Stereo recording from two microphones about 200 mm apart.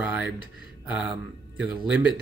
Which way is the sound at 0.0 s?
5° right (ahead or behind).